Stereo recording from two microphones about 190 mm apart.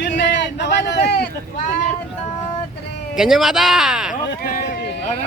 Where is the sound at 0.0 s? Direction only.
65° left (ahead or behind).